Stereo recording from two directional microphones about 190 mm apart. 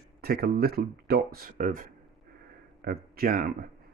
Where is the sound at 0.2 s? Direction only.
55° right (ahead or behind).